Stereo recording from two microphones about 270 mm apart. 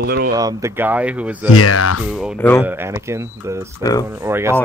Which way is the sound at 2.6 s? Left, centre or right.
Centre.